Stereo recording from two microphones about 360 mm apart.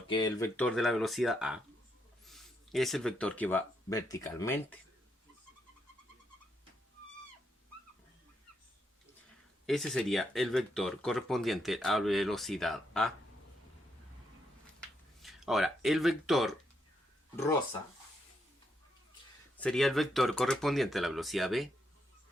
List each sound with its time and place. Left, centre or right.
0.1 s speech: centre
9.6 s speech: centre
14.8 s a sound: centre
19.5 s speech: centre